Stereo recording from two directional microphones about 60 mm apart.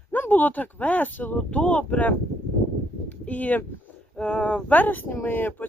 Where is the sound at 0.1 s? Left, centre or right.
Left.